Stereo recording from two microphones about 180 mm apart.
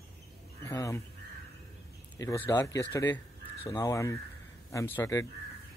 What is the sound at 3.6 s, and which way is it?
Speech, 20° left (ahead or behind).